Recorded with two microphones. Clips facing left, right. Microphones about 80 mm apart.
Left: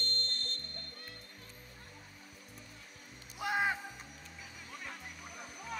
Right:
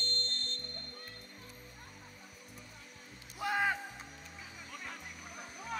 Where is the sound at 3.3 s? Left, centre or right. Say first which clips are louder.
Even; centre.